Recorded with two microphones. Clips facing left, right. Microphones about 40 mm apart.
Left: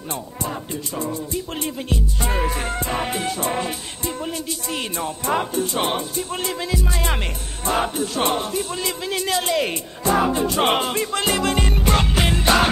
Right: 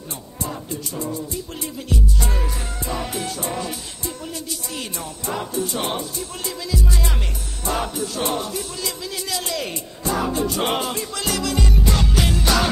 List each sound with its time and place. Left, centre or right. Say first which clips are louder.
0.9 s music: left 3 dB; left
2.1 s music: left 3 dB; left
2.4 s music: left 5 dB; left